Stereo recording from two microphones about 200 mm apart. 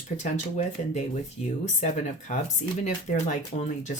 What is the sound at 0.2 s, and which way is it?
Speech, 35° left (ahead or behind).